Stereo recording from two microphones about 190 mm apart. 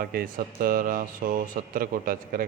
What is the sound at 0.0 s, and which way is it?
A man's voice, 50° right (ahead or behind).